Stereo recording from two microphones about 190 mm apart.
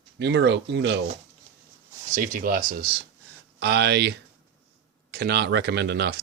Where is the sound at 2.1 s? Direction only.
45° right (ahead or behind).